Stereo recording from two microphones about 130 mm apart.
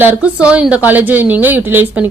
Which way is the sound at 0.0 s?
10° right (ahead or behind).